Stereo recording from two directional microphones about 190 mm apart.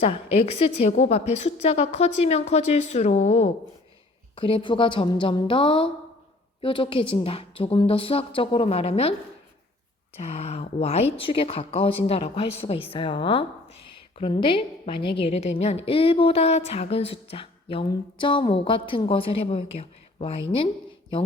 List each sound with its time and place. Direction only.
0.0 s a woman's voice: 30° left (ahead or behind)
10.2 s a woman's voice: 35° left (ahead or behind)